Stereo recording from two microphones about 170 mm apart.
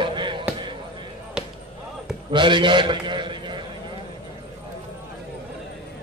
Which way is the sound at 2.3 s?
30° right (ahead or behind).